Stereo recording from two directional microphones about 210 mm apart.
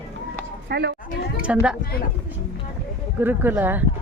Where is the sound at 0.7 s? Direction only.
50° right (ahead or behind).